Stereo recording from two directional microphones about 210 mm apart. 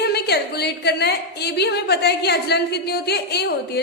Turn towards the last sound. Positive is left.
turn(degrees=50)  # may be behind; listen again after turning